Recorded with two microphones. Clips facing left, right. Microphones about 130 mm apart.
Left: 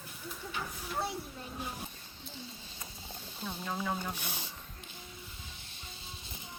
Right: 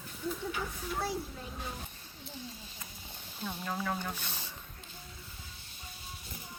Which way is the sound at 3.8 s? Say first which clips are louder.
Even; 10° left (ahead or behind).